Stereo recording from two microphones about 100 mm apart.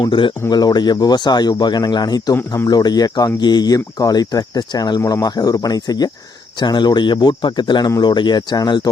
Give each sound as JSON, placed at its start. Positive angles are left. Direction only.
{"t": 0.0, "sound": "speech", "side_deg": 55}
{"t": 0.5, "sound": "speech", "side_deg": 45}